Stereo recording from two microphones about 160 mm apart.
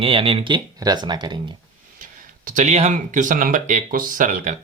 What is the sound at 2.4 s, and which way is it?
Speech, 50° right (ahead or behind).